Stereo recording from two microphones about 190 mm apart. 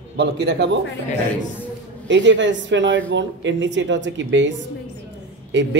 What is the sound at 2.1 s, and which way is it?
Speech, 70° right (ahead or behind).